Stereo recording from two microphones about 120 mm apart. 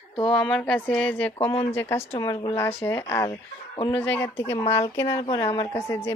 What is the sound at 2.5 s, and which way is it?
Speech, 20° left (ahead or behind).